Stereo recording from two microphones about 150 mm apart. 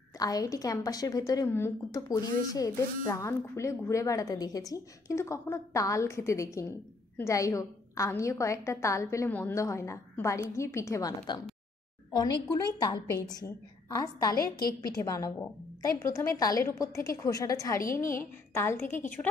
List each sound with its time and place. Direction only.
0.2 s a woman's voice: 25° left (ahead or behind)
12.8 s a woman's voice: 25° left (ahead or behind)